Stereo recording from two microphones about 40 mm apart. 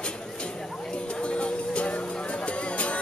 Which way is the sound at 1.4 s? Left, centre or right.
Left.